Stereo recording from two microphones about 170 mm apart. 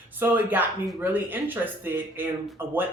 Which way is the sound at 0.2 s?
10° right (ahead or behind).